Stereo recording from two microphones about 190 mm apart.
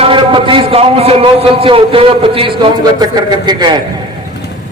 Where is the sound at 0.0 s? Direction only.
25° right (ahead or behind).